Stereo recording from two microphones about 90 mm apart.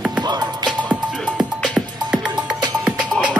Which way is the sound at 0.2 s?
50° right (ahead or behind).